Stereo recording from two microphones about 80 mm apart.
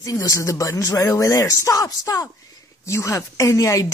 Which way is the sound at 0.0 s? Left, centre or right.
Left.